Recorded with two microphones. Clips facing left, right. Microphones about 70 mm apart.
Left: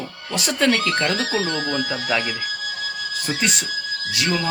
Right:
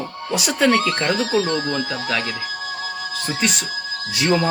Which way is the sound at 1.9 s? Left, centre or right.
Left.